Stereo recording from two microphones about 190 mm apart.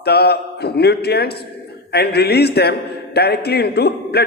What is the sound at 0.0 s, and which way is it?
A man's voice, 55° left (ahead or behind).